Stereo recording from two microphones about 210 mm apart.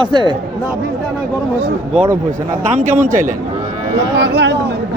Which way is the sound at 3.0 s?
35° right (ahead or behind).